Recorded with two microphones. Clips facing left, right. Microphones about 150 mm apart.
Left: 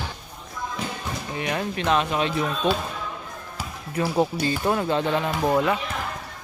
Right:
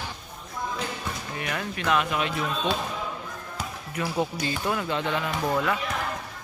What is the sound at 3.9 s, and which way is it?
Speech, 30° left (ahead or behind).